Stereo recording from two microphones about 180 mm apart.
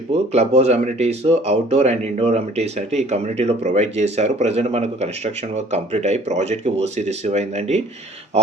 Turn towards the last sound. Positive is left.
turn(degrees=-40)  # may be behind; listen again after turning